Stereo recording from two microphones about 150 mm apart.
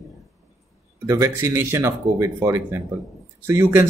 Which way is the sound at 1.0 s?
20° right (ahead or behind).